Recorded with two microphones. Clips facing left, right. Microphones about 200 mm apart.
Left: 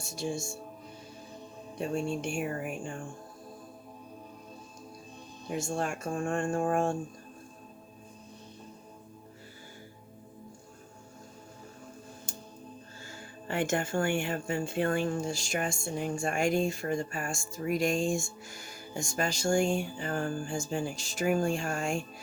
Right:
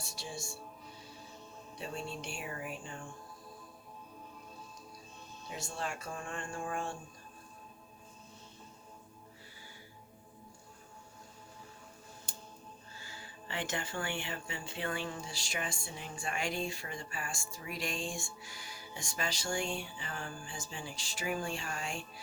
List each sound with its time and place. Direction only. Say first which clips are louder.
0.0 s speech: left 10 dB; 50° left (ahead or behind)
1.8 s speech: left 10 dB; 50° left (ahead or behind)
5.5 s speech: left 8 dB; 50° left (ahead or behind)
13.1 s speech: left 9 dB; 50° left (ahead or behind)